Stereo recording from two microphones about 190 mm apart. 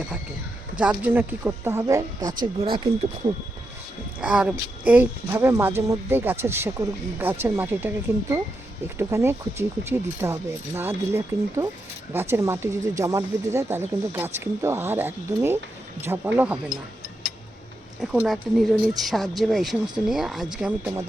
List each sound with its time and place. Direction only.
0.8 s speech: 10° right (ahead or behind); by 2.9 s 25° right (ahead or behind)
4.2 s speech: 5° right (ahead or behind)
9.0 s speech: 15° right (ahead or behind)
18.0 s speech: centre (ahead or behind)